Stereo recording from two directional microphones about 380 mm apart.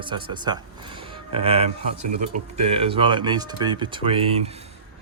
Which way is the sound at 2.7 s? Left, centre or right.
Centre.